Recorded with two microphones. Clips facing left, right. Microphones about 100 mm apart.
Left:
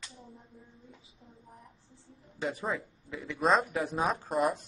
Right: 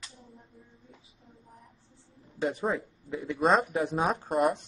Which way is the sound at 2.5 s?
25° right (ahead or behind).